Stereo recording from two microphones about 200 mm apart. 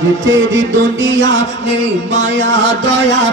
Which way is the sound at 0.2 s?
70° right (ahead or behind).